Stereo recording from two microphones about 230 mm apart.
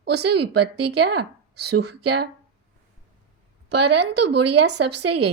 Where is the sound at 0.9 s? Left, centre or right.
Right.